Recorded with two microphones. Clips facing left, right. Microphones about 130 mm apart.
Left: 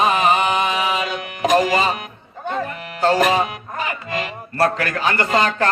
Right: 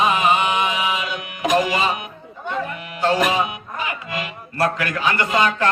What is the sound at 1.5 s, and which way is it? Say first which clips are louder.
Speech: left 2 dB; 40° left (ahead or behind).